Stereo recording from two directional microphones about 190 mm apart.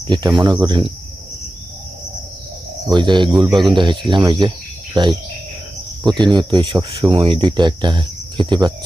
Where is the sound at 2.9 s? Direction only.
25° right (ahead or behind).